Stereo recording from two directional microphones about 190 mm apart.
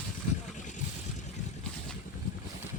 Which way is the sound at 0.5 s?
40° left (ahead or behind).